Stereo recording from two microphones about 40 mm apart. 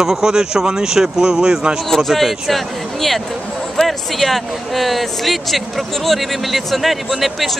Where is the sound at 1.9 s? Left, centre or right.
Centre.